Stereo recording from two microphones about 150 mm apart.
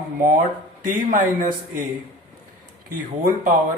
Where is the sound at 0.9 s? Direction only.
65° right (ahead or behind).